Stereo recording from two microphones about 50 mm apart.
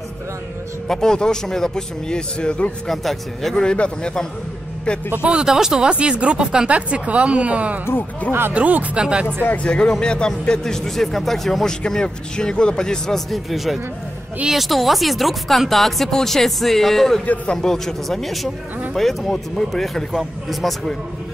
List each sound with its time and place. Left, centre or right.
0.8 s speech: centre
2.9 s speech: centre
3.5 s speech: centre
5.2 s speech: centre
8.3 s speech: right
8.5 s speech: right
9.6 s speech: left; by 11.7 s centre
11.8 s speech: centre